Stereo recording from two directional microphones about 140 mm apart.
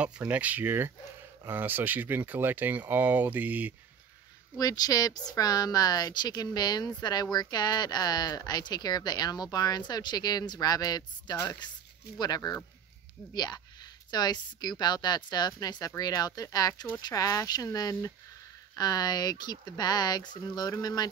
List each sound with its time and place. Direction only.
0.0 s speech: 10° right (ahead or behind)
4.6 s a woman's voice: 25° left (ahead or behind)